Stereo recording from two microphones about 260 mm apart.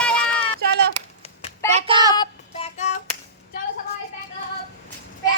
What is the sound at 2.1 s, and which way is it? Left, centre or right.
Child singing, centre.